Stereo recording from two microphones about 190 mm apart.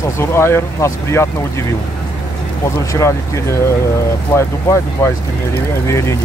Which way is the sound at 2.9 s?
15° left (ahead or behind).